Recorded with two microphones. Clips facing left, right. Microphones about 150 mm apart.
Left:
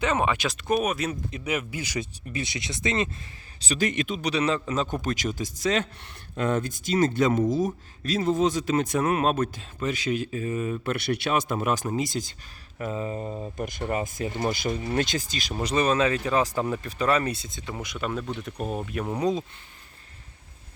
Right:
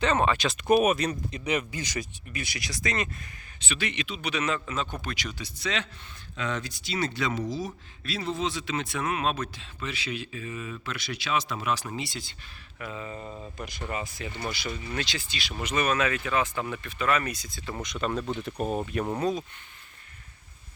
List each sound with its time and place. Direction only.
0.0 s speech: 10° left (ahead or behind)
0.4 s speech: 5° right (ahead or behind)
2.0 s speech: 25° left (ahead or behind)
3.6 s speech: 40° left (ahead or behind)
10.9 s speech: 60° left (ahead or behind); by 13.5 s 30° left (ahead or behind)
13.6 s speech: 50° left (ahead or behind); by 17.7 s 20° left (ahead or behind)
17.7 s speech: 5° left (ahead or behind)
19.2 s speech: 25° left (ahead or behind)